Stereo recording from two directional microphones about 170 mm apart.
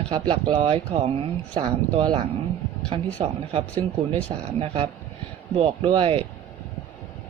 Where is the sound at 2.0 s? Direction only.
30° right (ahead or behind).